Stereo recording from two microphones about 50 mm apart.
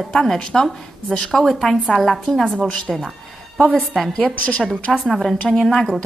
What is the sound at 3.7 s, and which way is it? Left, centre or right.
Speech, centre.